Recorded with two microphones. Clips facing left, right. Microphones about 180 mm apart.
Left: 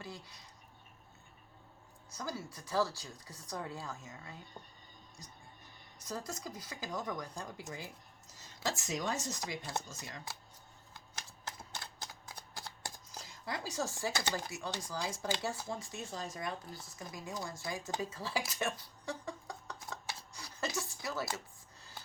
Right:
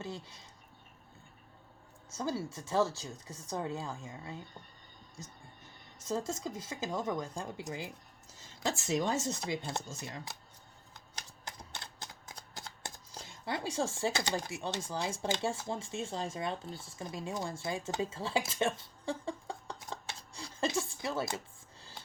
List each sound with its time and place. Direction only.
0.0 s speech: 25° right (ahead or behind)
2.1 s speech: 25° right (ahead or behind)
6.1 s speech: 25° right (ahead or behind)
8.9 s speech: 25° right (ahead or behind)
12.5 s speech: 25° right (ahead or behind)